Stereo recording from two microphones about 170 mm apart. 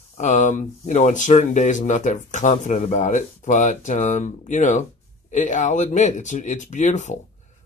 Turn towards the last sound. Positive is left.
turn(degrees=45)  # may be behind; listen again after turning